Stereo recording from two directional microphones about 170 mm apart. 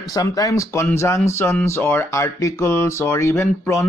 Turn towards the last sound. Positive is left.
turn(degrees=15)  # may be behind; listen again after turning